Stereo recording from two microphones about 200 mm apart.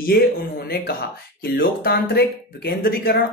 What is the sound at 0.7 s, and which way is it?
Speech, 50° left (ahead or behind).